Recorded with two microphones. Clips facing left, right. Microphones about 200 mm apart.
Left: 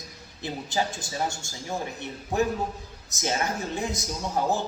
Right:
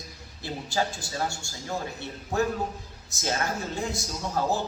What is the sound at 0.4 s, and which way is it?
A man's voice, 20° left (ahead or behind).